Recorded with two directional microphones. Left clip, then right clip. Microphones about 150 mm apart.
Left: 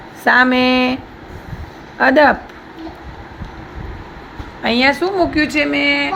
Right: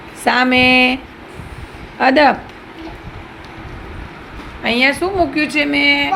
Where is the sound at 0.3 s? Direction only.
10° right (ahead or behind).